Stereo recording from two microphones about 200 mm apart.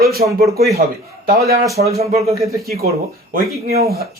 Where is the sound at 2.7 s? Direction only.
50° right (ahead or behind).